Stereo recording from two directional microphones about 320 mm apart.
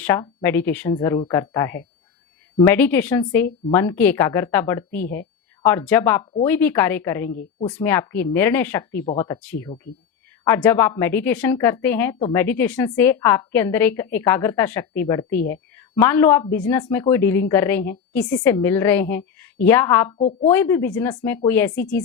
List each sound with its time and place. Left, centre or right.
0.0 s a woman's voice: centre
20.1 s a woman's voice: centre
20.5 s a woman's voice: centre